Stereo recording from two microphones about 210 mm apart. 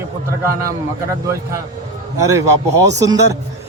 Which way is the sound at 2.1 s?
15° right (ahead or behind).